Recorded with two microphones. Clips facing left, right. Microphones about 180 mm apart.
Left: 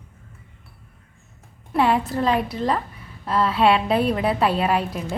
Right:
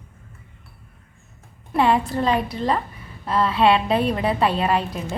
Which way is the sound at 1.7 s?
5° left (ahead or behind).